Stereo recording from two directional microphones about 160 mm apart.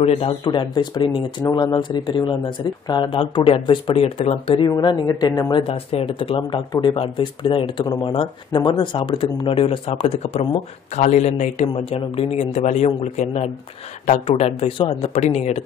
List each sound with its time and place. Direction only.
0.0 s speech: 35° left (ahead or behind)